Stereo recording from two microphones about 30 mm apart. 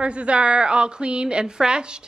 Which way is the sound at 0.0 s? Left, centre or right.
Right.